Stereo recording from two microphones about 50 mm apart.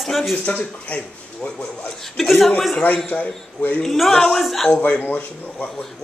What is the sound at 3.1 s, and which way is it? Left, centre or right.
Speech, left.